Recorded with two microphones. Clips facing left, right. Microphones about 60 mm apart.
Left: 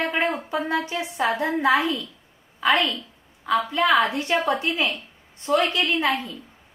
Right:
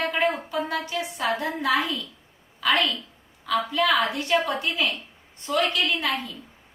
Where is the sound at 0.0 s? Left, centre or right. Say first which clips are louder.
Even; left.